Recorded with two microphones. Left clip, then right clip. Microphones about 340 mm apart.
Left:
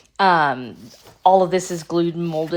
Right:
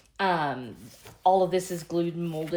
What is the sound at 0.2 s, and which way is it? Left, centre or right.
Speech, left.